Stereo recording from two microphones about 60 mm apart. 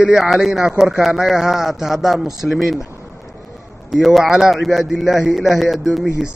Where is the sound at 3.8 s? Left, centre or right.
Centre.